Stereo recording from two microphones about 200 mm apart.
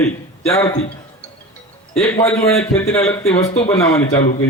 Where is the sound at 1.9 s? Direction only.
5° left (ahead or behind).